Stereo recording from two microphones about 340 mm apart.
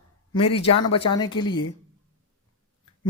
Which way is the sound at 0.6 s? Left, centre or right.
Left.